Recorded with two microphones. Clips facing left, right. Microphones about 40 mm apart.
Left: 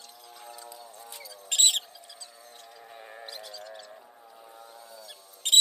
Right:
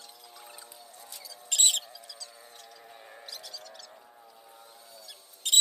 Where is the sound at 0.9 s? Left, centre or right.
Left.